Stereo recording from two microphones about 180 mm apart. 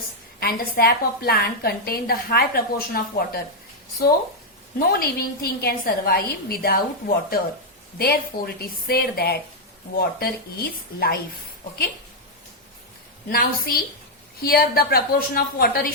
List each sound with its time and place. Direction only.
0.3 s a woman's voice: 60° left (ahead or behind)
4.8 s a woman's voice: 55° left (ahead or behind)
13.2 s a woman's voice: 55° left (ahead or behind)